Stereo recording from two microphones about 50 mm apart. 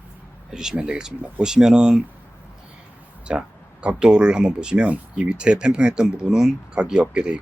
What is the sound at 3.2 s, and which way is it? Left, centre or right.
Speech, right.